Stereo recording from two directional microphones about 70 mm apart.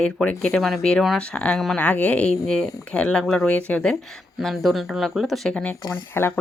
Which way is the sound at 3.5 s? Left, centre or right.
Centre.